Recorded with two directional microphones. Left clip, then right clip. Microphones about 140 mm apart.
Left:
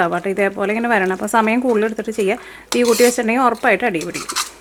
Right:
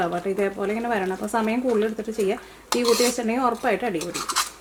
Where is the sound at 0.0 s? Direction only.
35° left (ahead or behind).